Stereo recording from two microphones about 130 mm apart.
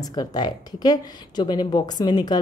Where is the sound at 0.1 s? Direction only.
30° left (ahead or behind).